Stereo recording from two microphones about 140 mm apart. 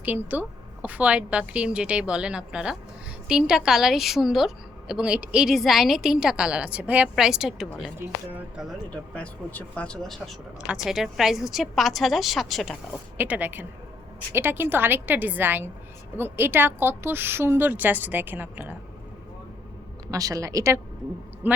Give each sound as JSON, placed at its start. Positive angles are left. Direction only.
{"t": 0.0, "sound": "a woman's voice", "side_deg": -15}
{"t": 8.9, "sound": "a woman's voice", "side_deg": 10}
{"t": 13.1, "sound": "a woman's voice", "side_deg": -10}
{"t": 20.1, "sound": "speech", "side_deg": -25}
{"t": 21.4, "sound": "a woman's voice", "side_deg": -10}